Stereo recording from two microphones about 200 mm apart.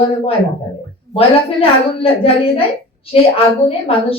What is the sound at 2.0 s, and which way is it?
A woman's voice, 30° left (ahead or behind).